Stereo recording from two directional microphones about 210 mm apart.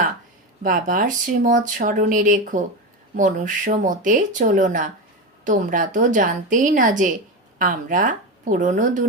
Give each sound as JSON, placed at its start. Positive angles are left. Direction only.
{"t": 0.6, "sound": "speech", "side_deg": -40}